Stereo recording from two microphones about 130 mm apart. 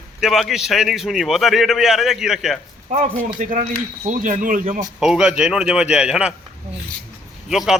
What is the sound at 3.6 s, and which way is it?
Speech, 80° right.